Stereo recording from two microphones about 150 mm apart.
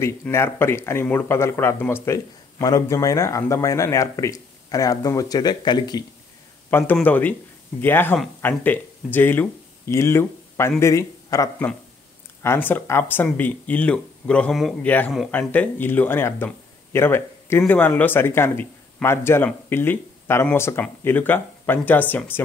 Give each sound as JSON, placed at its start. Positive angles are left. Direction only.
{"t": 0.0, "sound": "speech", "side_deg": 15}
{"t": 6.9, "sound": "speech", "side_deg": 10}